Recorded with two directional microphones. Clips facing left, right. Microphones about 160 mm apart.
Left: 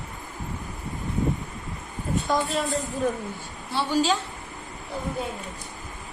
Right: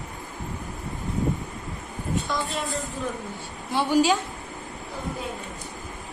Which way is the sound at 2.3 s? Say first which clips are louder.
Left 6 dB; 50° left (ahead or behind).